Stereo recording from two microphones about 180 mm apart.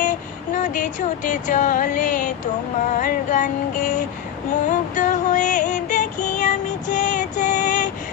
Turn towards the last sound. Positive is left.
turn(degrees=45)  # may be behind; listen again after turning